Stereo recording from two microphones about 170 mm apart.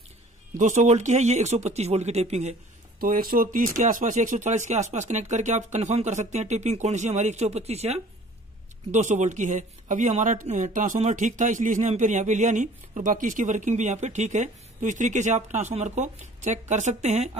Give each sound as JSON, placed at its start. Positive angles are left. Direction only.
{"t": 0.6, "sound": "speech", "side_deg": -45}
{"t": 3.0, "sound": "speech", "side_deg": -60}